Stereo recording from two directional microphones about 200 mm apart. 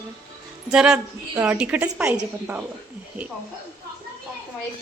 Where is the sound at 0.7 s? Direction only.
5° right (ahead or behind).